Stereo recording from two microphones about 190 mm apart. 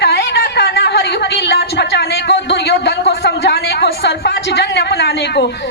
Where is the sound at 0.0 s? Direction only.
60° left (ahead or behind).